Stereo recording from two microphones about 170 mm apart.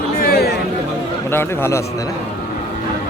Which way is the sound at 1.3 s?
15° left (ahead or behind).